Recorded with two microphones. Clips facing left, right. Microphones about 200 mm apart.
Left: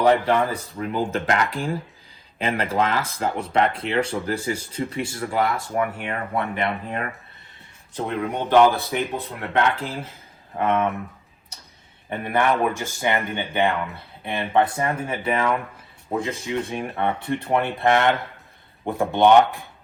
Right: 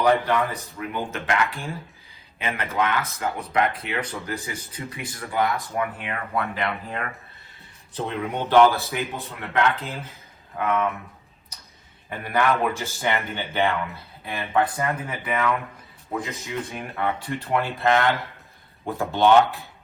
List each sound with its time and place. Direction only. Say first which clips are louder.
0.0 s speech: left 2 dB; 30° left (ahead or behind)
7.9 s speech: left 2 dB; 15° left (ahead or behind)
9.5 s speech: left 1 dB; 30° left (ahead or behind)
12.0 s speech: left 1 dB; 25° left (ahead or behind)
17.2 s speech: left 3 dB; 20° left (ahead or behind)